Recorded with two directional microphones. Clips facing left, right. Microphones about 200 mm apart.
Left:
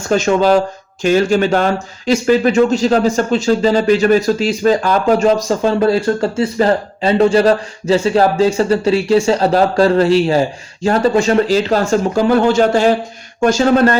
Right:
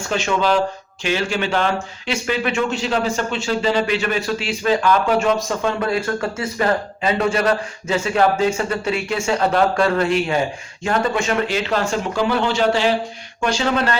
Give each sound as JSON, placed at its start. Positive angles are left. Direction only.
{"t": 0.1, "sound": "speech", "side_deg": 40}